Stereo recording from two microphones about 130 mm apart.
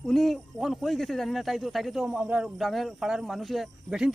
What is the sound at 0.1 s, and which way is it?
Speech, centre (ahead or behind).